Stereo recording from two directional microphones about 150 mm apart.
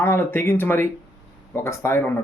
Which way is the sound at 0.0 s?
15° left (ahead or behind).